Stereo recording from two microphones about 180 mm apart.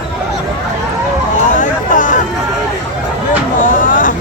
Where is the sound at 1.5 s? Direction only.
45° left (ahead or behind).